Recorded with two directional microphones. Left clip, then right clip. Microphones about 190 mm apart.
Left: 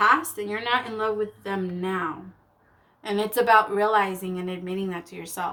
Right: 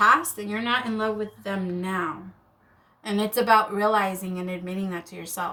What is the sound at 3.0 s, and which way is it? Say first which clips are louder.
Speech: left 1 dB; 40° left (ahead or behind).